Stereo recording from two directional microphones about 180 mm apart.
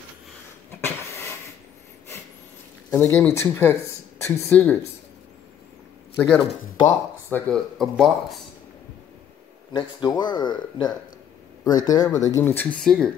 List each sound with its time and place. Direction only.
0.7 s a sound: 15° left (ahead or behind)
2.9 s speech: 10° left (ahead or behind)
6.1 s speech: 10° left (ahead or behind)
9.7 s speech: 25° left (ahead or behind); by 13.1 s 5° left (ahead or behind)